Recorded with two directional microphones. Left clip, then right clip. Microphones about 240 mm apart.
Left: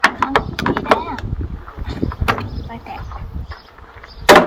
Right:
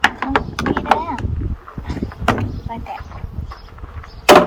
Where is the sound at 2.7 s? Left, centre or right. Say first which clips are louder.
Right 7 dB; right.